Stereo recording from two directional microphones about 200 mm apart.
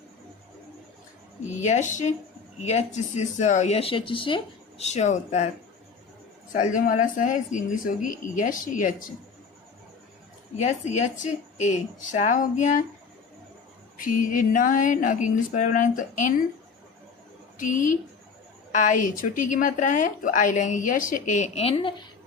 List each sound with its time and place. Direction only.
1.6 s speech: 35° left (ahead or behind)
6.5 s speech: 40° left (ahead or behind)
10.6 s speech: 35° left (ahead or behind)
14.0 s speech: 40° left (ahead or behind)
17.6 s speech: 40° left (ahead or behind)